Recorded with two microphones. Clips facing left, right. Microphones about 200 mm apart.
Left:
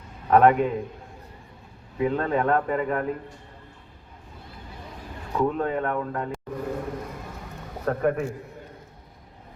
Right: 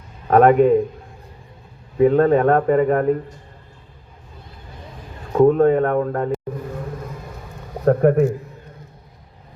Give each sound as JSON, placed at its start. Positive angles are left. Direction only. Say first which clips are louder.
{"t": 0.3, "sound": "speech", "louder": "right 6 dB", "side_deg": -45}
{"t": 2.0, "sound": "speech", "louder": "right 10 dB", "side_deg": -45}
{"t": 5.3, "sound": "speech", "louder": "right 11 dB", "side_deg": -45}
{"t": 7.9, "sound": "speech", "louder": "right 10 dB", "side_deg": -40}